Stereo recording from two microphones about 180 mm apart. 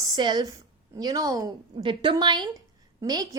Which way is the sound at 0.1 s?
25° right (ahead or behind).